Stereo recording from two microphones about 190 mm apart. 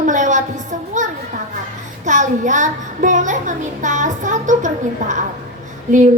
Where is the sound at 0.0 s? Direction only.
40° right (ahead or behind).